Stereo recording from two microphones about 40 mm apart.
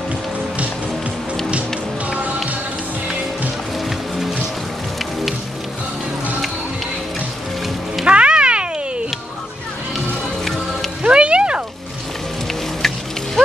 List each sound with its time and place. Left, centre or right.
8.0 s cat: right
10.4 s music: centre
11.0 s music: right
12.8 s music: centre